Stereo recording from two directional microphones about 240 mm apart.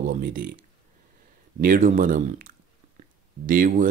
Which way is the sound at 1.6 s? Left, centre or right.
Right.